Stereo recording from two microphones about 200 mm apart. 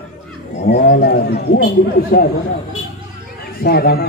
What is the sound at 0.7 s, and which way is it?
A man's voice, 55° left (ahead or behind).